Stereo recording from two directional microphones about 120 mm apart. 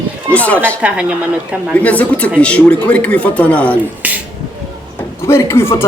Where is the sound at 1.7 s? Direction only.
10° left (ahead or behind).